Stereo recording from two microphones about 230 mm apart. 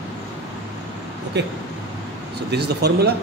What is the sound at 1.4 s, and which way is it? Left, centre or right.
Speech, right.